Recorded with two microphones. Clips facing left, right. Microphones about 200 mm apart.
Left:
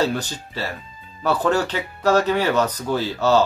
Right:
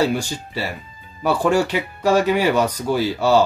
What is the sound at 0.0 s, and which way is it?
Speech, 10° right (ahead or behind).